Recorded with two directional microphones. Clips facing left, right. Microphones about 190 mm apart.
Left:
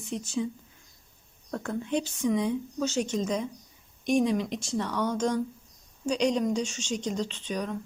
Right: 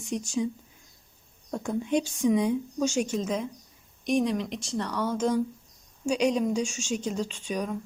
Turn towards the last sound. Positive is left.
turn(degrees=-10)  # may be behind; listen again after turning